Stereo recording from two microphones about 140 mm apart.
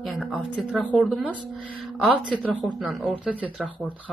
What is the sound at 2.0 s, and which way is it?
Music, 5° right (ahead or behind).